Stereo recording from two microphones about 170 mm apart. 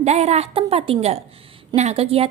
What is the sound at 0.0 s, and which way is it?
A woman's voice, 40° right (ahead or behind).